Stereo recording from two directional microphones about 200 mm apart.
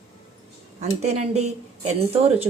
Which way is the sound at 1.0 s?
35° right (ahead or behind).